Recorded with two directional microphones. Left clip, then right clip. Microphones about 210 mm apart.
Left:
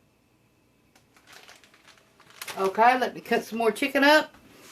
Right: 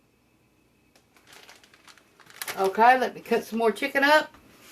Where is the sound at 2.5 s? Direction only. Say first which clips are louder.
Right 2 dB; 20° left (ahead or behind); by 4.2 s 35° left (ahead or behind).